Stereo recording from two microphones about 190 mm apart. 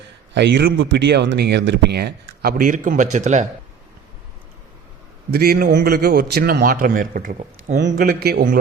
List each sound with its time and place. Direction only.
0.3 s speech: 65° right (ahead or behind); by 3.4 s 40° right (ahead or behind)
5.3 s a man's voice: 55° right (ahead or behind)
7.8 s speech: 60° right (ahead or behind)